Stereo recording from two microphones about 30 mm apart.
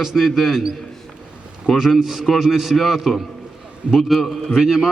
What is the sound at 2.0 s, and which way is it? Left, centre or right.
A man's voice, centre.